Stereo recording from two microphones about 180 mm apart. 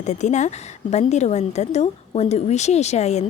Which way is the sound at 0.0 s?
40° left (ahead or behind).